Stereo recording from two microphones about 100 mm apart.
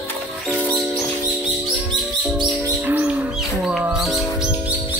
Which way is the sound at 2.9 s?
15° right (ahead or behind).